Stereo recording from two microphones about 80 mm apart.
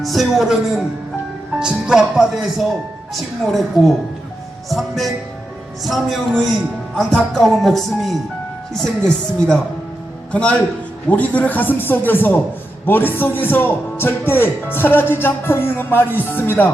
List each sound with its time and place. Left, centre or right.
0.0 s a man's voice: centre; by 16.7 s left